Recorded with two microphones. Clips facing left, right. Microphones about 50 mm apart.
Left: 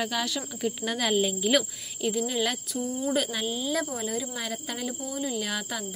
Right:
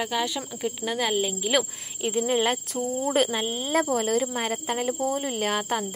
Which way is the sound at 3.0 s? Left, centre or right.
Right.